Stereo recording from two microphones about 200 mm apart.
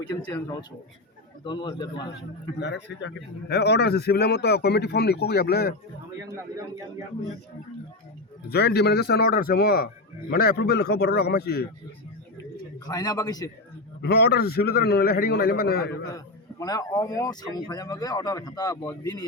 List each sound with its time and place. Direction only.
0.3 s a man's voice: 15° left (ahead or behind)
2.6 s a man's voice: 60° left (ahead or behind)
8.4 s a man's voice: 55° left (ahead or behind)
12.8 s a man's voice: 20° left (ahead or behind)
14.0 s a man's voice: 55° left (ahead or behind)
16.1 s speech: 15° left (ahead or behind)